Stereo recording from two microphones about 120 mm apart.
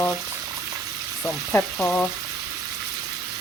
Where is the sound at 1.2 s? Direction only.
10° left (ahead or behind).